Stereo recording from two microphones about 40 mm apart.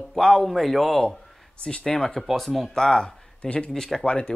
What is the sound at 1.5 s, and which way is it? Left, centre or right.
Speech, left.